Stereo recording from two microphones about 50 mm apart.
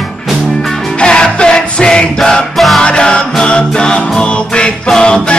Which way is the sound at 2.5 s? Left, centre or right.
Centre.